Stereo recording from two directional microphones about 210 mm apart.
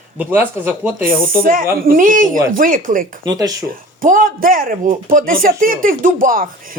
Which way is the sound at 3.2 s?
15° right (ahead or behind).